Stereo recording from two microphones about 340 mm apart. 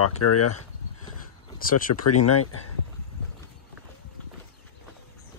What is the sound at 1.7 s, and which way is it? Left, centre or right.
Speech, left.